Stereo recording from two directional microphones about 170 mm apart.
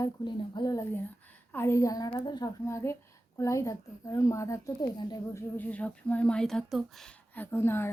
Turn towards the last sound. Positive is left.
turn(degrees=15)  # may be behind; listen again after turning